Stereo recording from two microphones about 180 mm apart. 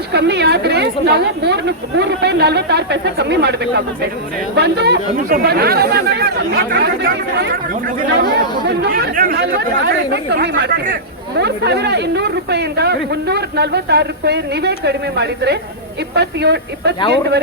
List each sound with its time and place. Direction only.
0.1 s speech: 65° right (ahead or behind)